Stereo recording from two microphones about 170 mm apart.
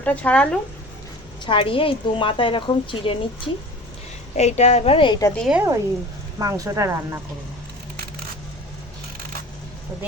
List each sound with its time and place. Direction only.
0.0 s speech: 10° left (ahead or behind)
1.5 s a woman's voice: 30° left (ahead or behind)
4.4 s a woman's voice: 40° left (ahead or behind)
5.4 s speech: 5° right (ahead or behind)
6.4 s speech: 20° right (ahead or behind)